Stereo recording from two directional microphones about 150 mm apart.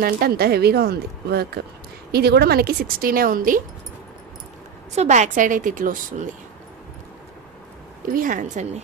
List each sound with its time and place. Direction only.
0.0 s a woman's voice: 85° right; by 3.6 s 65° right (ahead or behind)
4.9 s a woman's voice: 50° right (ahead or behind)
8.1 s a woman's voice: 65° right (ahead or behind)